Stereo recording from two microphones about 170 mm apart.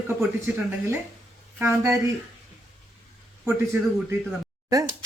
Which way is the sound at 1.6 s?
15° right (ahead or behind).